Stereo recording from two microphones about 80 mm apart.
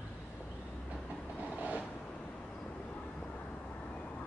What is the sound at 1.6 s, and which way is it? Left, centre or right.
Vehicle, centre.